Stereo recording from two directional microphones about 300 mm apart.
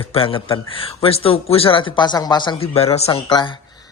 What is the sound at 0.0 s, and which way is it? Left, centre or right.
A man's voice, centre.